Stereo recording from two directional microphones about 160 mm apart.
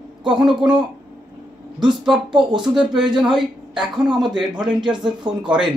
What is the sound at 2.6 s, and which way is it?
Speech, 5° right (ahead or behind).